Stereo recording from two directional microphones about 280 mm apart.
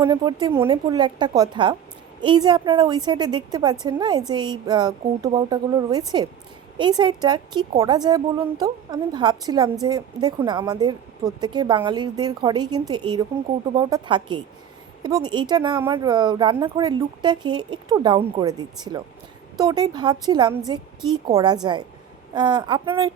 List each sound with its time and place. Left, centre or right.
0.0 s speech: centre